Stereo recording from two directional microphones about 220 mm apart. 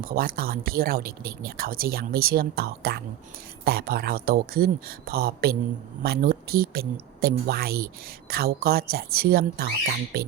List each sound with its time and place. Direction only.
0.0 s speech: 40° right (ahead or behind)